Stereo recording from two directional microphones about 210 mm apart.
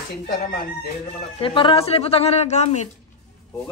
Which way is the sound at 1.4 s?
25° left (ahead or behind).